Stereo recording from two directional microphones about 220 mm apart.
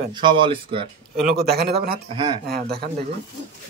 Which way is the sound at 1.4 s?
45° right (ahead or behind).